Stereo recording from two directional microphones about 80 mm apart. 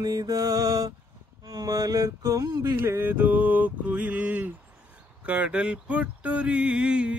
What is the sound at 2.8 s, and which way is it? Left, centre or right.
Mantra, right.